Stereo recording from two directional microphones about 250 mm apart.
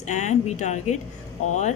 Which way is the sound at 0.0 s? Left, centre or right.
Left.